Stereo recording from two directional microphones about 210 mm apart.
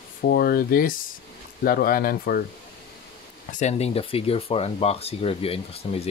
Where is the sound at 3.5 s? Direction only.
30° left (ahead or behind).